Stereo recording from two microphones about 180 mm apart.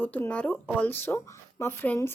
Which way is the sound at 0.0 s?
10° left (ahead or behind).